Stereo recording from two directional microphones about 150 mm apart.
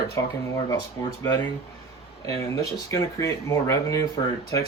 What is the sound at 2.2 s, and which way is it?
Speech, 20° left (ahead or behind).